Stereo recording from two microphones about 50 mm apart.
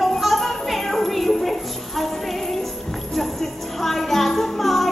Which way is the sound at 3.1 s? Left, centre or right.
Centre.